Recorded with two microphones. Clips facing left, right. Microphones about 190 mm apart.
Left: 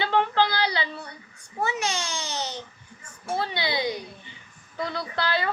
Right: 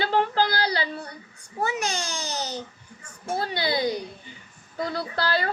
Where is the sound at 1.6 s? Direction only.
35° right (ahead or behind).